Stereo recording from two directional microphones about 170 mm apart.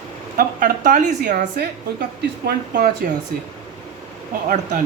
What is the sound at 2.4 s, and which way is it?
Speech, 70° right (ahead or behind).